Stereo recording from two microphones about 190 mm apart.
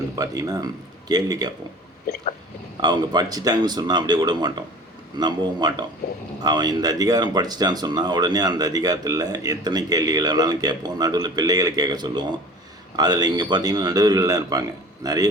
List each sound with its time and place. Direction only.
0.2 s speech: 20° right (ahead or behind)
2.8 s speech: 20° right (ahead or behind)